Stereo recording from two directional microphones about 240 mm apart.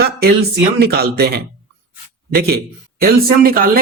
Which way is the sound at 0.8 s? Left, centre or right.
Right.